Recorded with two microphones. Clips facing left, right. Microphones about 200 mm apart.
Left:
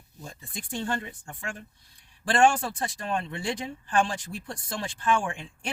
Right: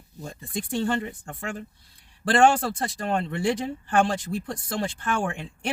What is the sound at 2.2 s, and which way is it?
Speech, 65° right (ahead or behind).